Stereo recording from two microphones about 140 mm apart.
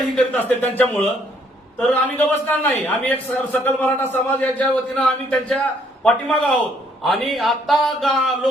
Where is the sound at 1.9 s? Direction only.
10° left (ahead or behind).